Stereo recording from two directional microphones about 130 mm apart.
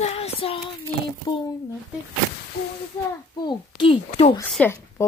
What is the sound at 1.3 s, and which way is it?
Speech, 35° left (ahead or behind).